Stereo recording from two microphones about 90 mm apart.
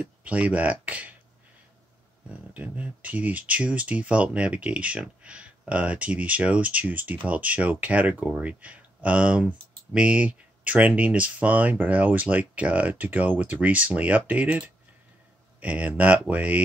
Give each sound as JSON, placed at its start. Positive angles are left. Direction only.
{"t": 0.0, "sound": "speech", "side_deg": -15}
{"t": 2.5, "sound": "speech", "side_deg": -15}